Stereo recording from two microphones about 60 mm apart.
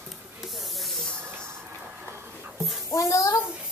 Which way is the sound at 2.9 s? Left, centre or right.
Left.